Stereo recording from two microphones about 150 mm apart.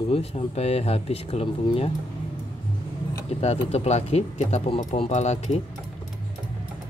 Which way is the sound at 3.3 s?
45° left (ahead or behind).